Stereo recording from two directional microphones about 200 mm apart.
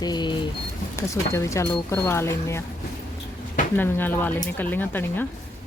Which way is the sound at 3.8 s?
10° left (ahead or behind).